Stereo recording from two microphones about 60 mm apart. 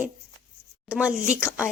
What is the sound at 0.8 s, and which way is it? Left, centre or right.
Speech, centre.